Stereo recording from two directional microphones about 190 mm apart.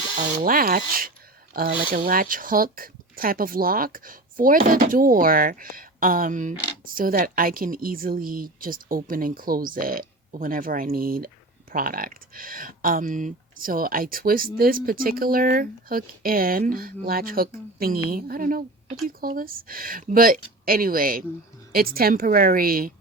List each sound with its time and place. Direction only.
0.4 s speech: 50° right (ahead or behind)